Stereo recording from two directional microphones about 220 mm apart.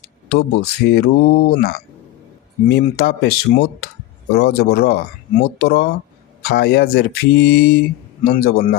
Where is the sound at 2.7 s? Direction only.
45° left (ahead or behind).